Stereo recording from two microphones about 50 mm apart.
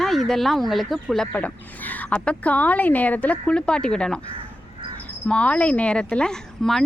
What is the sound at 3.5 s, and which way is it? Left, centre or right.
Speech, centre.